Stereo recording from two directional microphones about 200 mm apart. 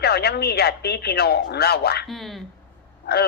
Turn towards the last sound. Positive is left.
turn(degrees=55)  # may be behind; listen again after turning